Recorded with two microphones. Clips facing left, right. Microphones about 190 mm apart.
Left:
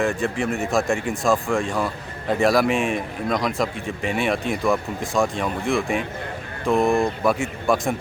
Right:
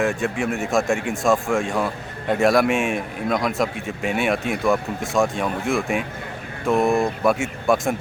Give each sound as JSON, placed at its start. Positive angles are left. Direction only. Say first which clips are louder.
{"t": 0.0, "sound": "speech", "louder": "even", "side_deg": 0}